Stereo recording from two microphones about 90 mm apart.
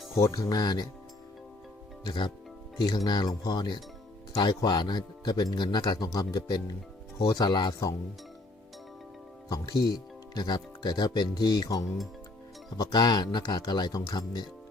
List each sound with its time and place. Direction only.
0.2 s speech: 35° left (ahead or behind)
2.0 s speech: 60° left (ahead or behind); by 7.9 s 45° left (ahead or behind)
9.5 s speech: 45° left (ahead or behind)